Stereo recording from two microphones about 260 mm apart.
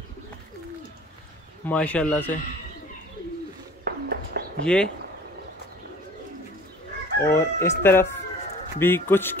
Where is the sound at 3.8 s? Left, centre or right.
Right.